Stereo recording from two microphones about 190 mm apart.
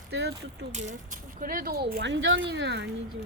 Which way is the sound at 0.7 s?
40° right (ahead or behind).